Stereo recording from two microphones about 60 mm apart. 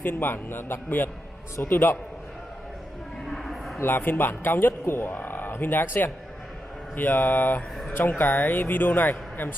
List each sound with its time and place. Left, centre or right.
0.0 s speech: left
3.3 s a sound: centre
3.8 s speech: left